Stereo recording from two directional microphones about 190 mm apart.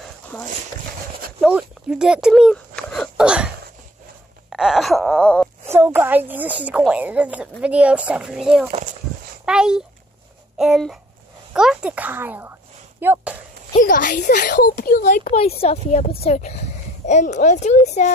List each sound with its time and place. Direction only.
0.3 s speech: 5° left (ahead or behind)
4.5 s wail: 5° right (ahead or behind)
5.7 s a woman's voice: 10° right (ahead or behind)
13.7 s a woman's voice: 45° left (ahead or behind)